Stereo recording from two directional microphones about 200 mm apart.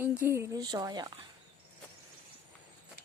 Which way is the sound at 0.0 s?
10° right (ahead or behind).